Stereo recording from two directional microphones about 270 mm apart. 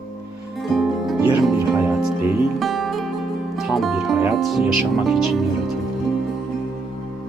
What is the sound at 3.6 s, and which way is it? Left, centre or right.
Speech, centre.